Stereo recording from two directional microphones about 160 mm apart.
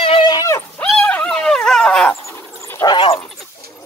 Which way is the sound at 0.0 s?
30° left (ahead or behind).